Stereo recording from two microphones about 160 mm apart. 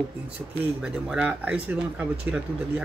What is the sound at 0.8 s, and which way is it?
Speech, 5° right (ahead or behind).